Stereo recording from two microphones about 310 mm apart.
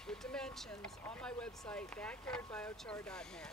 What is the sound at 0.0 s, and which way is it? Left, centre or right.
Speech, centre.